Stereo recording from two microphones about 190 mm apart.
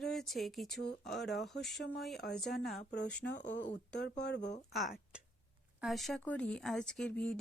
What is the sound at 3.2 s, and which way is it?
Speech, 65° left (ahead or behind).